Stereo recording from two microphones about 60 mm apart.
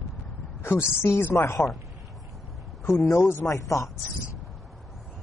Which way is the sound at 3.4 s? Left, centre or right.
Left.